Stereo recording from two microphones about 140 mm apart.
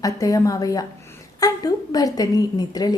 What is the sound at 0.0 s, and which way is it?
A woman's voice, 25° left (ahead or behind).